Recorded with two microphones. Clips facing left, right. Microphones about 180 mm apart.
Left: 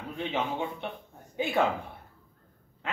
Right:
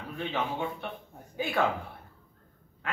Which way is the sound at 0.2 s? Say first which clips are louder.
Left 1 dB; 20° left (ahead or behind).